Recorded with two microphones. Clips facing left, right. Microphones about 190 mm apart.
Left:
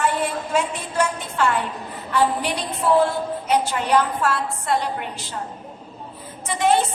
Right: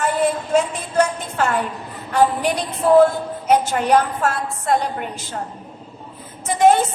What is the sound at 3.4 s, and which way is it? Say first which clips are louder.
A woman's voice: right 6 dB; 45° right (ahead or behind).